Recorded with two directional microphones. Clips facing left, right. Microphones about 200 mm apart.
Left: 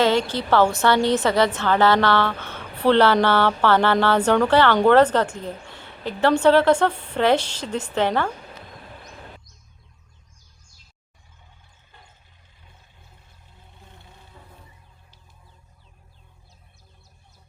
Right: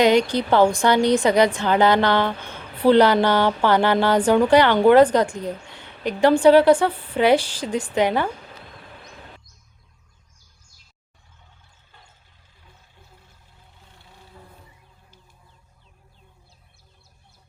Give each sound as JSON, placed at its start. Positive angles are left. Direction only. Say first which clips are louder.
{"t": 0.0, "sound": "a woman's voice", "louder": "right 3 dB", "side_deg": -15}